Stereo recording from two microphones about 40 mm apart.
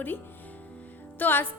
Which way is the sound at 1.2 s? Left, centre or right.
Left.